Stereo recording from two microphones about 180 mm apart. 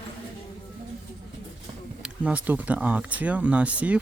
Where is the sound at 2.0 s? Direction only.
5° right (ahead or behind).